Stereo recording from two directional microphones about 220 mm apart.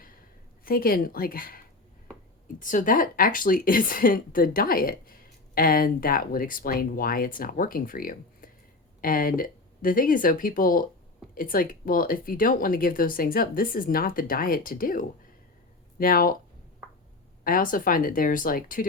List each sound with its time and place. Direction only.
0.6 s speech: 40° left (ahead or behind)
17.4 s speech: 40° left (ahead or behind)